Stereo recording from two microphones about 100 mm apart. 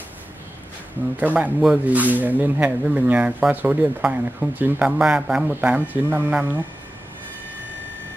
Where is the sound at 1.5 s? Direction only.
5° right (ahead or behind).